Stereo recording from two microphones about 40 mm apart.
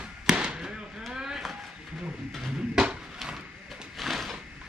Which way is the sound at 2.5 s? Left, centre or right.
Centre.